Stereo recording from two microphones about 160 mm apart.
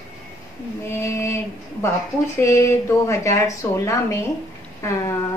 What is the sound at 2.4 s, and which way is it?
A woman's voice, 20° left (ahead or behind).